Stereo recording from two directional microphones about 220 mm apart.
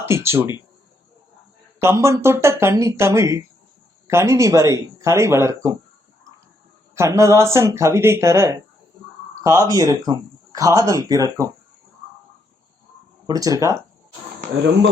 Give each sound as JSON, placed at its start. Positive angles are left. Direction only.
{"t": 0.0, "sound": "speech", "side_deg": -10}
{"t": 1.8, "sound": "speech", "side_deg": -10}
{"t": 6.9, "sound": "speech", "side_deg": -15}
{"t": 13.2, "sound": "speech", "side_deg": -15}
{"t": 14.6, "sound": "speech", "side_deg": -55}